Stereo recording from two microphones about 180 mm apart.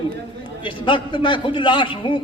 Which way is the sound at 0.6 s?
25° left (ahead or behind).